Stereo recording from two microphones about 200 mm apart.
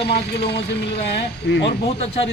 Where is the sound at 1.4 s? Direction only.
60° left (ahead or behind).